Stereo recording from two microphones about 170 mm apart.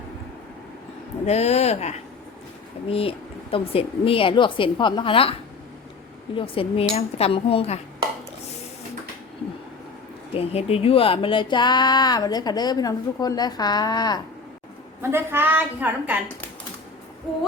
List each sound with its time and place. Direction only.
1.2 s a woman's voice: 40° left (ahead or behind)
6.3 s a woman's voice: 30° left (ahead or behind)
10.3 s speech: 35° left (ahead or behind)
15.1 s a woman's voice: 10° right (ahead or behind)